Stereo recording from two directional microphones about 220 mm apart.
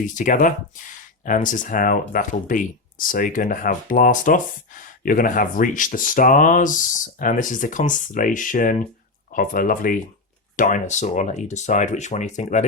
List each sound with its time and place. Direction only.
0.1 s speech: 35° left (ahead or behind)